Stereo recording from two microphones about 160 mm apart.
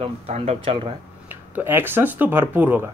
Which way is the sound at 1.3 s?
15° right (ahead or behind).